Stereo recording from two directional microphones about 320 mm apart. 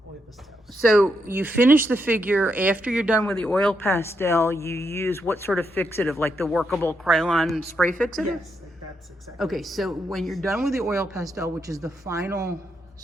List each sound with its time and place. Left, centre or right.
1.0 s speech: centre
9.4 s speech: centre